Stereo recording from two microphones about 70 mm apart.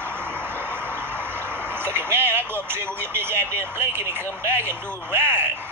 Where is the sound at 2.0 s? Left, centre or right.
Right.